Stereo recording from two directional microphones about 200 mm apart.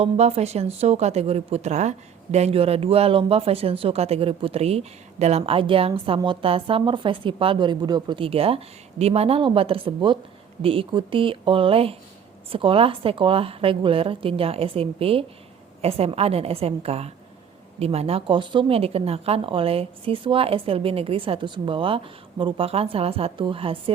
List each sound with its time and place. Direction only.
0.0 s a woman's voice: 30° right (ahead or behind)